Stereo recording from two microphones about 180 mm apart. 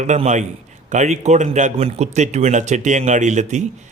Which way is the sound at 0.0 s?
40° right (ahead or behind).